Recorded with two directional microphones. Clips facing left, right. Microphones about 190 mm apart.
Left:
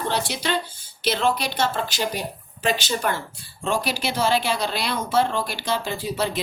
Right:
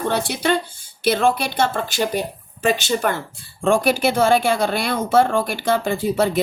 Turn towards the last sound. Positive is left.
turn(degrees=-55)  # may be behind; listen again after turning